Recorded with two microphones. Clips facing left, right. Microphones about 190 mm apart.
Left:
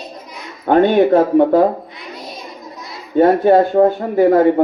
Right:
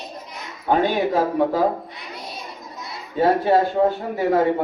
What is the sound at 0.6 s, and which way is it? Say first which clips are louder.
Speech: left 8 dB; 55° left (ahead or behind).